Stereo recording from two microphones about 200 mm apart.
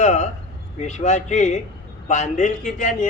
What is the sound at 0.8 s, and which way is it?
Speech, 35° left (ahead or behind).